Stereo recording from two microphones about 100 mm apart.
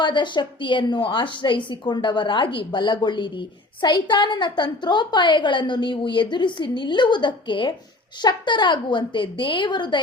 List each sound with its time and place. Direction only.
0.0 s a woman's voice: 50° left (ahead or behind)